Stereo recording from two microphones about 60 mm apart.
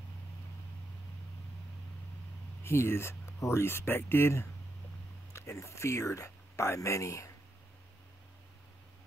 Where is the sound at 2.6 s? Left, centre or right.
Left.